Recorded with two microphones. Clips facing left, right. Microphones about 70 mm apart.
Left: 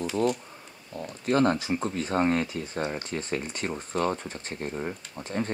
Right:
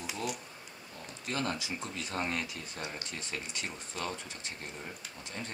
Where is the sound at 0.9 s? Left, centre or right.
Left.